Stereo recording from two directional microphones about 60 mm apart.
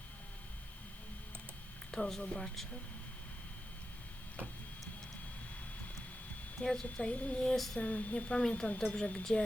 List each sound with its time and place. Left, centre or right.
1.9 s speech: centre
6.6 s speech: centre
7.5 s a sound: centre
7.8 s speech: left